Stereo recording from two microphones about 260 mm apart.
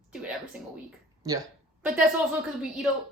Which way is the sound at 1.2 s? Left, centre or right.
Centre.